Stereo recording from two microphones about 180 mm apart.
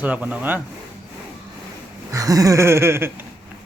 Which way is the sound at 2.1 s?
20° right (ahead or behind).